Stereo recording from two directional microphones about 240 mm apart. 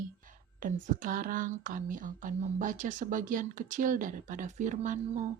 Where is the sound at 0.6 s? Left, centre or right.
Right.